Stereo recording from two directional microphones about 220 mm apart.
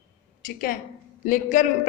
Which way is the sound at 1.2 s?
35° left (ahead or behind).